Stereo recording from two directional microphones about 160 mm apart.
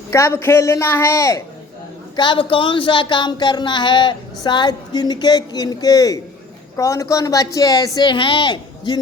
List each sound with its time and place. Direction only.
0.1 s a woman's voice: 15° left (ahead or behind)
2.1 s speech: 30° left (ahead or behind)